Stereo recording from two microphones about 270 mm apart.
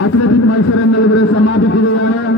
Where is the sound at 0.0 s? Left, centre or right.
Left.